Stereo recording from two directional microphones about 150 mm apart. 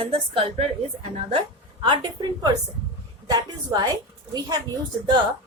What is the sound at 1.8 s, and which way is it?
A woman's voice, 30° right (ahead or behind).